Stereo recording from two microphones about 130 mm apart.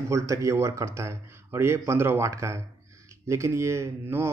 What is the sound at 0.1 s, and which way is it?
A man's voice, 25° right (ahead or behind).